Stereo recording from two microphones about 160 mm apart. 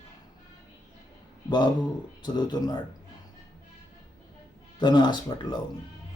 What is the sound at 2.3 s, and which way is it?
Speech, 25° left (ahead or behind).